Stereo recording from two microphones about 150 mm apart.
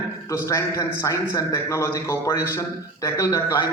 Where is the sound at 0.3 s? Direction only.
20° left (ahead or behind).